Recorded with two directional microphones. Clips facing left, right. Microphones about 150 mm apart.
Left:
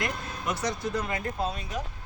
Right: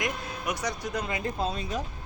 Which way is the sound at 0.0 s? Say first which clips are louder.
Even; 15° right (ahead or behind).